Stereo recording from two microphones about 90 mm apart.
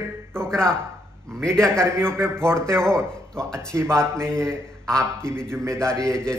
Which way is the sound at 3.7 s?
30° right (ahead or behind).